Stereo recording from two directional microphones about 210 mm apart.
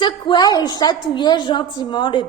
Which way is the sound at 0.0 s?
20° left (ahead or behind).